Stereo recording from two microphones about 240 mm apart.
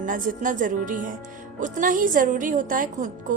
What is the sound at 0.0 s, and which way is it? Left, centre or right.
Speech, right.